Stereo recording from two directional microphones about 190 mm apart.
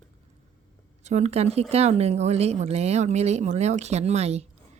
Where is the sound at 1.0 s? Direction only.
35° right (ahead or behind).